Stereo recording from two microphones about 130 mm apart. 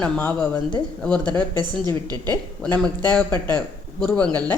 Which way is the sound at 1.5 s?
30° right (ahead or behind).